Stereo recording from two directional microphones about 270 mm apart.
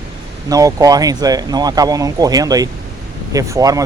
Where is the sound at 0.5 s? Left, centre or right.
Centre.